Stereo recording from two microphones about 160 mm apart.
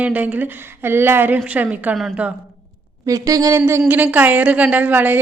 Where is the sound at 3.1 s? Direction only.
20° right (ahead or behind).